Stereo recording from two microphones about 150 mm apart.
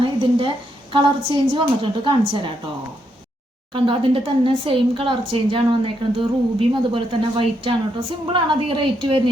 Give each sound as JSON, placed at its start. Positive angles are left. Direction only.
{"t": 0.0, "sound": "a sound", "side_deg": -35}
{"t": 0.9, "sound": "speech", "side_deg": -35}
{"t": 3.7, "sound": "speech", "side_deg": -35}